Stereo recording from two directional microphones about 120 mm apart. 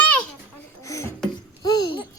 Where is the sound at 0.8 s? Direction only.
25° left (ahead or behind).